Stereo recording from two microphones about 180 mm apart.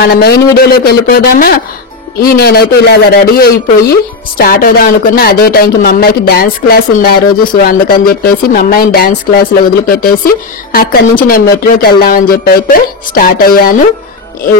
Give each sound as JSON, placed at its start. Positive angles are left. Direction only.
{"t": 0.0, "sound": "speech", "side_deg": 65}